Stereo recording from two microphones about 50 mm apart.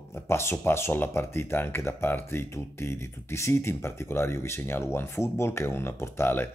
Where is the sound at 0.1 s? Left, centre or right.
Left.